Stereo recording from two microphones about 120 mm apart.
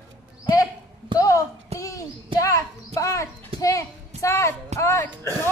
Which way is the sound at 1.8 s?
25° left (ahead or behind).